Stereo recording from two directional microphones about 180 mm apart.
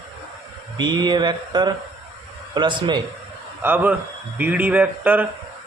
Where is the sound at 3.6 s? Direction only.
10° right (ahead or behind).